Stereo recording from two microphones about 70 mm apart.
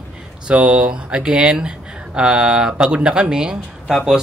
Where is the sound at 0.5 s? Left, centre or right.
Centre.